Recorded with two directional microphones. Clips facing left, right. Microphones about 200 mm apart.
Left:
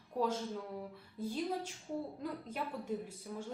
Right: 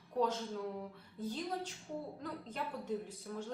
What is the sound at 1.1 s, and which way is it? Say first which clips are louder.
A woman's voice: left 2 dB; 10° left (ahead or behind).